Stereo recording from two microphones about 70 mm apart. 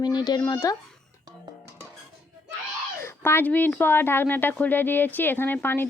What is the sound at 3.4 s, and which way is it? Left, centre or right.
Speech, left.